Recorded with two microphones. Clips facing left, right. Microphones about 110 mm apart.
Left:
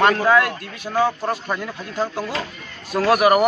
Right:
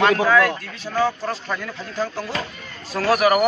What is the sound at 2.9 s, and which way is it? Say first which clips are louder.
Speech: left 2 dB; 10° left (ahead or behind).